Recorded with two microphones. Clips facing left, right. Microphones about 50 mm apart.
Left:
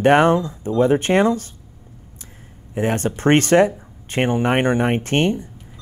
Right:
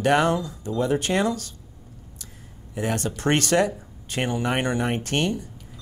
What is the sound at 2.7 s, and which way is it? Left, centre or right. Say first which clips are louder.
A man's voice: left 6 dB; left.